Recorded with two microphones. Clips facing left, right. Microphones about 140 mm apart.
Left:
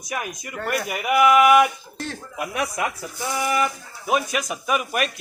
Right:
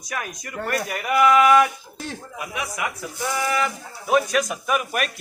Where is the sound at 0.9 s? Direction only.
10° left (ahead or behind).